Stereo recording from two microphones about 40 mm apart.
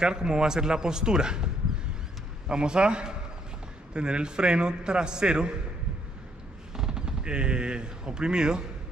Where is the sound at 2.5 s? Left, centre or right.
Right.